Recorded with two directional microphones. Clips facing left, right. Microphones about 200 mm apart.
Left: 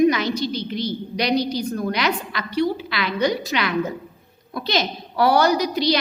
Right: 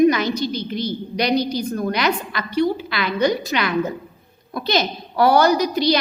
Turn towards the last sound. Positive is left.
turn(degrees=-50)  # may be behind; listen again after turning